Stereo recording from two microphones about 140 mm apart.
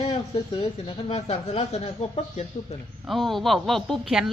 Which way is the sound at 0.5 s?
40° left (ahead or behind).